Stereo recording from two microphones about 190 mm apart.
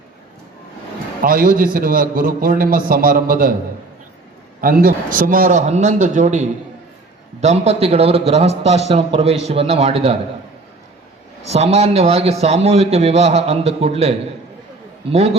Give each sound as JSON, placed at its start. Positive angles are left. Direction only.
{"t": 1.2, "sound": "a man's voice", "side_deg": -50}
{"t": 4.6, "sound": "a man's voice", "side_deg": -50}
{"t": 11.4, "sound": "a man's voice", "side_deg": -35}